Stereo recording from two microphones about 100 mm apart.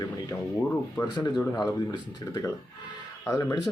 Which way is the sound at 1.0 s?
30° left (ahead or behind).